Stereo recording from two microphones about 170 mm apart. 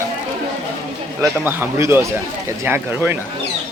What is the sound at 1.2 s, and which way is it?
Speech, 15° right (ahead or behind).